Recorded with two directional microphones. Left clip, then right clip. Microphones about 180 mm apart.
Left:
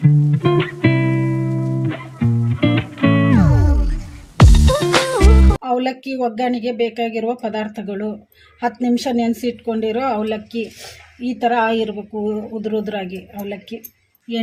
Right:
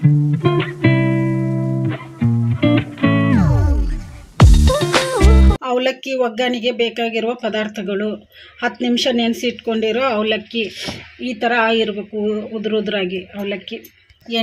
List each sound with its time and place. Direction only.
0.0 s music: centre (ahead or behind)
5.6 s a sound: 40° right (ahead or behind)
6.8 s speech: 40° right (ahead or behind)